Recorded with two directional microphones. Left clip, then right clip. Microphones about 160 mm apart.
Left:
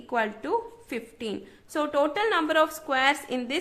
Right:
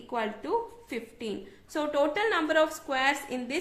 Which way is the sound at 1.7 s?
30° left (ahead or behind).